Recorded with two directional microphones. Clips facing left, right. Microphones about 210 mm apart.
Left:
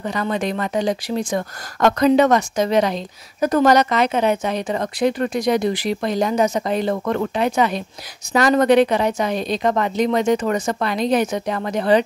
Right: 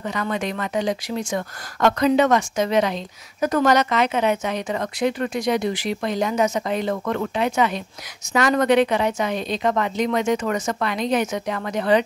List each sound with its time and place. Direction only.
0.0 s speech: 35° left (ahead or behind)